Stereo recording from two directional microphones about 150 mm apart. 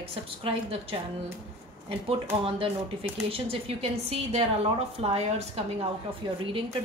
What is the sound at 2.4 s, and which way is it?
A woman's voice, 40° right (ahead or behind).